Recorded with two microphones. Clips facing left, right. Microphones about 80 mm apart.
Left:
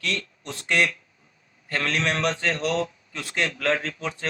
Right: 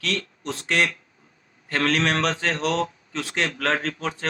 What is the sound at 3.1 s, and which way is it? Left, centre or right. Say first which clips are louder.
Speech: right 5 dB; right.